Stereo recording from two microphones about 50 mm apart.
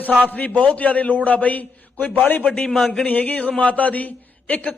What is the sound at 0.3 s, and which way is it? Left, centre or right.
A man's voice, left.